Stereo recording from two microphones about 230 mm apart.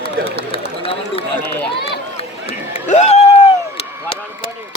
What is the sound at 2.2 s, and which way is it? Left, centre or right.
Run, left.